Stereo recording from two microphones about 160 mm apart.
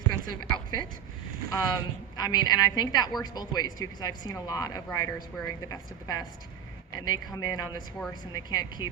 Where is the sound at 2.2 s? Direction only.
25° left (ahead or behind).